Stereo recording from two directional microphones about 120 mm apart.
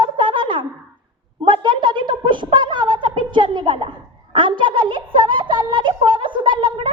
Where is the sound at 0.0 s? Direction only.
40° right (ahead or behind).